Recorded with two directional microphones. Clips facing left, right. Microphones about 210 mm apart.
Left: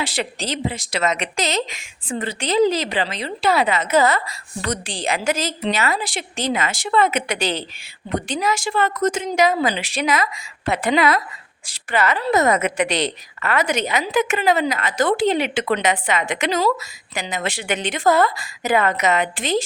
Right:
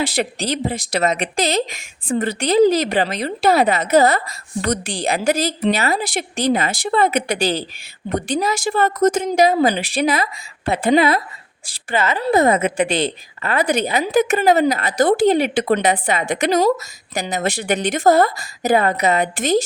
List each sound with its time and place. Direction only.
0.0 s a woman's voice: 40° right (ahead or behind)